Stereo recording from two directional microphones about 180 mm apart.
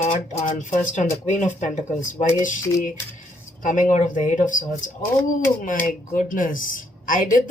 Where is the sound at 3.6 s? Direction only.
45° left (ahead or behind).